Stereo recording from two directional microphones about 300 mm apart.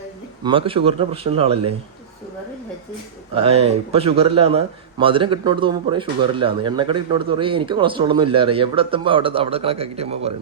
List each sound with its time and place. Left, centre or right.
0.4 s speech: centre
3.3 s speech: centre